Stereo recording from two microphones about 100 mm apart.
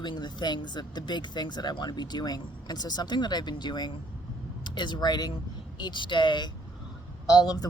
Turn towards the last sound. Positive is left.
turn(degrees=40)  # may be behind; listen again after turning